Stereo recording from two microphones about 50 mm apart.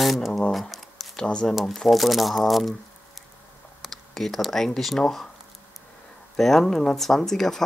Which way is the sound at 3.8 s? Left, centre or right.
Centre.